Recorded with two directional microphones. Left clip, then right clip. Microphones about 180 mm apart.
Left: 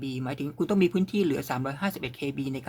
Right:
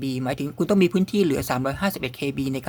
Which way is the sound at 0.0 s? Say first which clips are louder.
Right 6 dB; 30° right (ahead or behind).